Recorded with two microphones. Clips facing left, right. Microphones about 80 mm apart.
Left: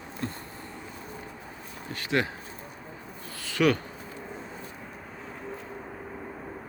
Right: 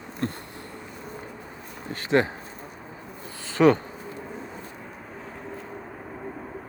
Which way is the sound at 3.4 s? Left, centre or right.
Right.